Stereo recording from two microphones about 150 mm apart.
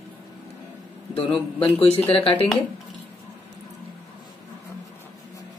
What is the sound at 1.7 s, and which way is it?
Speech, 40° left (ahead or behind).